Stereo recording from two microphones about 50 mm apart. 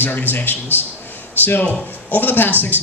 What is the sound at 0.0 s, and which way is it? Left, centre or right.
Speech, left.